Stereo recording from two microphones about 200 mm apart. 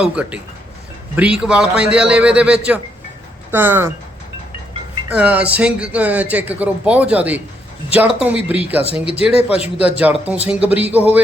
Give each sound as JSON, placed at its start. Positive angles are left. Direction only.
{"t": 0.0, "sound": "a man's voice", "side_deg": -5}
{"t": 5.0, "sound": "speech", "side_deg": -5}
{"t": 9.3, "sound": "speech", "side_deg": 30}
{"t": 10.0, "sound": "speech", "side_deg": -5}